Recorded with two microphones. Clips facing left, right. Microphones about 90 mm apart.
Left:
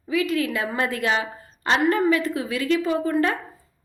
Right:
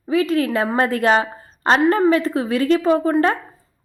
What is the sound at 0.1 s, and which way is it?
A woman's voice, 35° right (ahead or behind).